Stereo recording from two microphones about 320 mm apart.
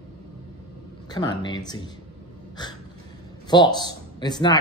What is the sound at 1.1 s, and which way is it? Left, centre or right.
Speech, centre.